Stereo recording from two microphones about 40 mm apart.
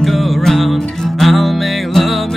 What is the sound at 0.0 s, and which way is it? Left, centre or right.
Music, centre.